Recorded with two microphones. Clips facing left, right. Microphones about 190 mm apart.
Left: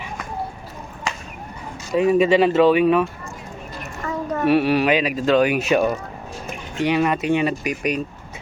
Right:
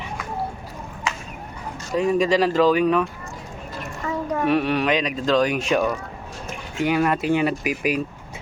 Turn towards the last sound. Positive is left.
turn(degrees=-5)  # may be behind; listen again after turning